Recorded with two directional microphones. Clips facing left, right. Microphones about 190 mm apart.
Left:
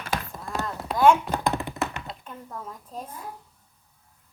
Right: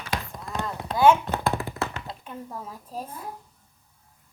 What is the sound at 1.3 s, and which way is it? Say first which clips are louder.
Music: even; 15° left (ahead or behind).